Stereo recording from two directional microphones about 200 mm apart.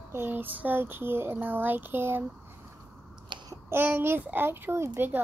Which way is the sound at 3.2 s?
20° right (ahead or behind).